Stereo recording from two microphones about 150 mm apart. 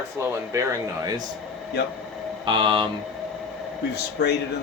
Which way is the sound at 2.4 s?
30° right (ahead or behind).